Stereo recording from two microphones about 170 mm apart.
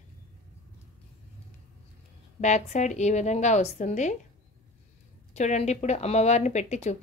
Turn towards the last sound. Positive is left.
turn(degrees=40)  # may be behind; listen again after turning